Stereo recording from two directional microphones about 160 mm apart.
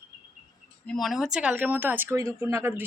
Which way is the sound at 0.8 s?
Centre (ahead or behind).